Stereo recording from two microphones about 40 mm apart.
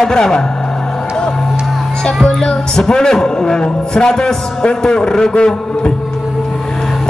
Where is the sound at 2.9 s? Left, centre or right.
Centre.